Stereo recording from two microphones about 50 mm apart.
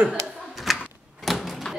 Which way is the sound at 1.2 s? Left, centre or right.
Centre.